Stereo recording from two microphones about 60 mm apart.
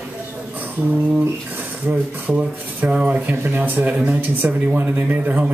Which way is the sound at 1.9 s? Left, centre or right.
Right.